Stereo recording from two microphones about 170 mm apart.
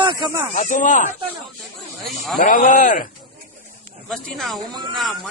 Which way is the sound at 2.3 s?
50° left (ahead or behind).